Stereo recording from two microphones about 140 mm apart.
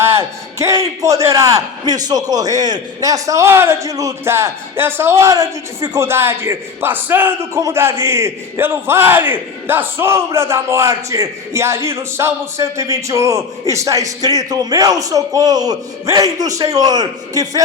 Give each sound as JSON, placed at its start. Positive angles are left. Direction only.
{"t": 0.0, "sound": "a man's voice", "side_deg": -20}